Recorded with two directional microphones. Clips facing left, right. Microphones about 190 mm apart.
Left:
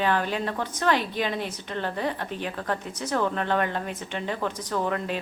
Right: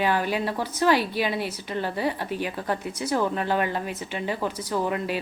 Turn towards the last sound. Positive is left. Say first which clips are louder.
# right 1 dB
turn(degrees=-10)  # may be behind; listen again after turning